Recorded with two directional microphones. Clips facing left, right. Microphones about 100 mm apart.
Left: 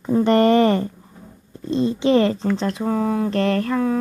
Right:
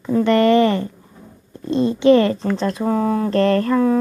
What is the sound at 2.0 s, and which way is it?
Speech, 20° left (ahead or behind).